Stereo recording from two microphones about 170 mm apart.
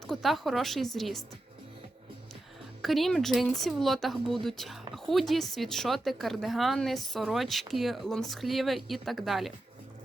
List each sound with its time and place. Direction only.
0.1 s speech: centre (ahead or behind)
2.8 s speech: centre (ahead or behind)